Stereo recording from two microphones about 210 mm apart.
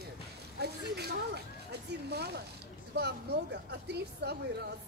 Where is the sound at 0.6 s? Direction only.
50° right (ahead or behind).